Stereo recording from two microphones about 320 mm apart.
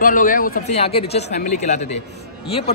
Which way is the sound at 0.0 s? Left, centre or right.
Left.